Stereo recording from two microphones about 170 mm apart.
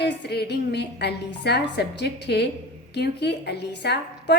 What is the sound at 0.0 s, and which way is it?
A woman's voice, 75° left (ahead or behind).